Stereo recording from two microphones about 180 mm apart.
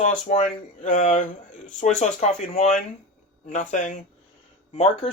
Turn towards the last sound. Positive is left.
turn(degrees=35)  # may be behind; listen again after turning